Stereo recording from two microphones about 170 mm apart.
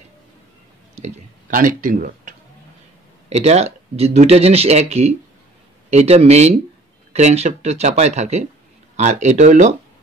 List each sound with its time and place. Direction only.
0.9 s speech: 50° right (ahead or behind)
3.3 s speech: 40° right (ahead or behind)